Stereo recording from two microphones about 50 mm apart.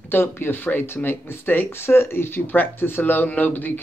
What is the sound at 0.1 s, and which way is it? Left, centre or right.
Speech, left.